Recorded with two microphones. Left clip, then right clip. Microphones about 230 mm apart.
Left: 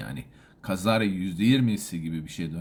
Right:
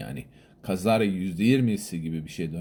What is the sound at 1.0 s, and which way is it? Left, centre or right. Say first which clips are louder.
Speech: even; left.